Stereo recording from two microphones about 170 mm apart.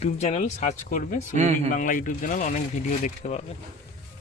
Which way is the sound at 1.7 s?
50° left (ahead or behind).